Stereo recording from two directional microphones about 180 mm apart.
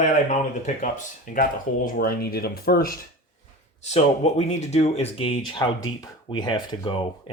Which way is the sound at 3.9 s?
40° left (ahead or behind).